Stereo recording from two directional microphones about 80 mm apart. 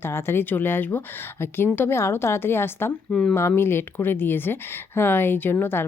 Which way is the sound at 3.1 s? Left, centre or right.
Centre.